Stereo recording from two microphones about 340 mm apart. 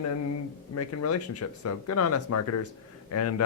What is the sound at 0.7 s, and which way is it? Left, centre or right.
Speech, left.